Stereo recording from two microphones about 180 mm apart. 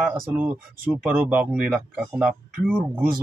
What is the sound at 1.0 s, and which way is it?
A man's voice, 10° right (ahead or behind).